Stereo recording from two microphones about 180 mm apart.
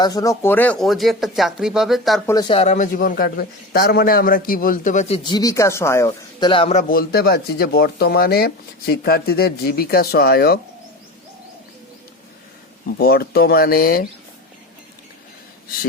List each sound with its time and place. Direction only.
0.0 s speech: 20° left (ahead or behind); by 2.2 s centre (ahead or behind)
2.2 s a man's voice: 20° left (ahead or behind)
6.5 s a man's voice: 30° left (ahead or behind)
6.8 s speech: 55° left (ahead or behind)
13.0 s speech: 60° left (ahead or behind)